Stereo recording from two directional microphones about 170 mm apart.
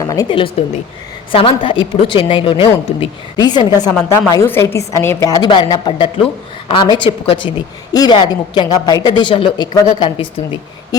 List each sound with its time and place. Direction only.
0.0 s a woman's voice: 20° left (ahead or behind)